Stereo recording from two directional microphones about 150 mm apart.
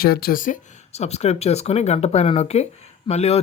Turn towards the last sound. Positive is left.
turn(degrees=45)  # may be behind; listen again after turning